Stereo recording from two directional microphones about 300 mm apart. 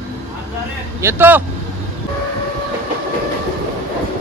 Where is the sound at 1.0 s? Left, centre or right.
Centre.